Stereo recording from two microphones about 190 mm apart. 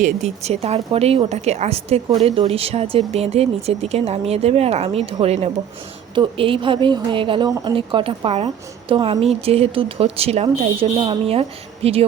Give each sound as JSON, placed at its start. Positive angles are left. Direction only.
{"t": 0.0, "sound": "a woman's voice", "side_deg": -35}